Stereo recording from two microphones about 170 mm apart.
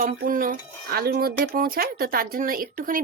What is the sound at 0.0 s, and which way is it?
Speech, 55° right (ahead or behind).